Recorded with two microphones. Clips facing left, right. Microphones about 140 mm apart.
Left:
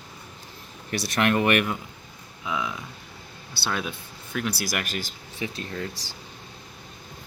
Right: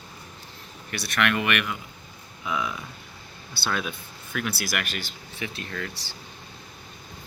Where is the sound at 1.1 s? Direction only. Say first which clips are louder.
Left 3 dB; 40° left (ahead or behind).